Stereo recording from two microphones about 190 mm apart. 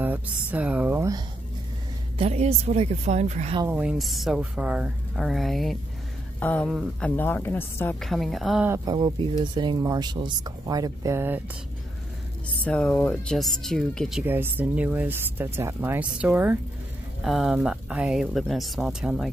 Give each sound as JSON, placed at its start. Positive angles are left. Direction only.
{"t": 0.0, "sound": "speech", "side_deg": -10}
{"t": 2.1, "sound": "a woman's voice", "side_deg": -35}
{"t": 3.6, "sound": "speech", "side_deg": -5}
{"t": 8.6, "sound": "speech", "side_deg": -15}
{"t": 12.6, "sound": "speech", "side_deg": 5}